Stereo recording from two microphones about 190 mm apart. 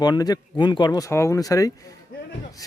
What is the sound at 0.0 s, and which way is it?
Speech, 20° left (ahead or behind).